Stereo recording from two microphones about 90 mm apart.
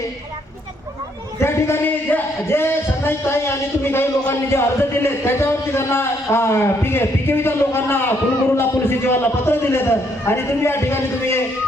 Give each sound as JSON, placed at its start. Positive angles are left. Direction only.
{"t": 1.4, "sound": "speech", "side_deg": 30}